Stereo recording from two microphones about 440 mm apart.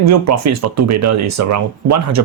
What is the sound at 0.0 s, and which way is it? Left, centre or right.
Speech, right.